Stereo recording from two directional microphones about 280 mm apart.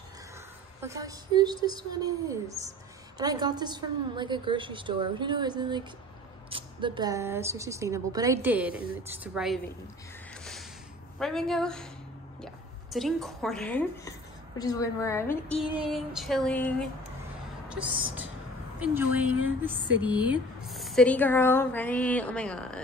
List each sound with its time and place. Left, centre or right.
0.7 s a woman's voice: centre
10.3 s music: centre
11.1 s a woman's voice: centre
12.9 s a woman's voice: centre
17.6 s a sound: centre
18.8 s a woman's voice: centre